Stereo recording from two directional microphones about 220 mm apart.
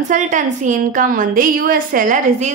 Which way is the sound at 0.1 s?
35° right (ahead or behind).